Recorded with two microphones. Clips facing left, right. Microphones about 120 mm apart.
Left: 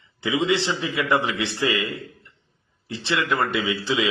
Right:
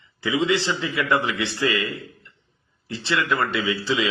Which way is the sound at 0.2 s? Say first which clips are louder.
Even; 20° left (ahead or behind).